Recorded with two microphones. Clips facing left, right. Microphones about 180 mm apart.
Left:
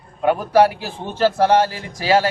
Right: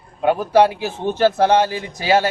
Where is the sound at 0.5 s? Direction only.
20° right (ahead or behind).